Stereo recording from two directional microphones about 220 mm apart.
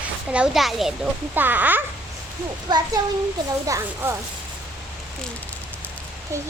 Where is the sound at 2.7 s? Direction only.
20° right (ahead or behind).